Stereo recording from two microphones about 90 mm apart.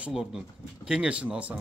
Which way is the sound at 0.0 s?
5° right (ahead or behind).